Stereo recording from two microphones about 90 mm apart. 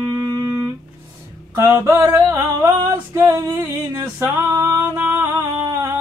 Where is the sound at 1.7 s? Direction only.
30° right (ahead or behind).